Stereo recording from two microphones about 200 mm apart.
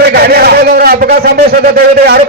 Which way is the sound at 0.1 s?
50° right (ahead or behind).